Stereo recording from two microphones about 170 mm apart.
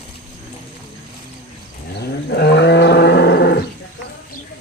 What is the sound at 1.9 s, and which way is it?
Livestock, 75° left (ahead or behind).